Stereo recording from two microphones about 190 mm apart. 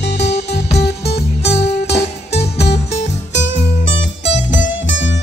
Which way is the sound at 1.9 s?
35° left (ahead or behind).